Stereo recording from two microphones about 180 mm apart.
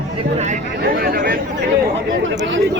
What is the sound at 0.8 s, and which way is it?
Speech, 55° right (ahead or behind).